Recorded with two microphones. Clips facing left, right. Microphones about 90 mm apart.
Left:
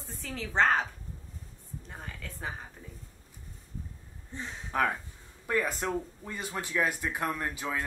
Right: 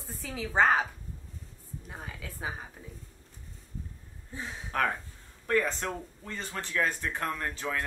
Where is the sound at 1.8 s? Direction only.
5° right (ahead or behind).